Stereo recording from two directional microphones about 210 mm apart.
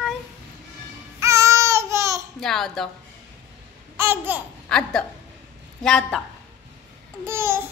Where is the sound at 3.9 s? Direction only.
10° right (ahead or behind).